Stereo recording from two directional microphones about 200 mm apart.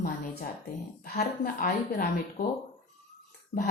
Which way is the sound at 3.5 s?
40° left (ahead or behind).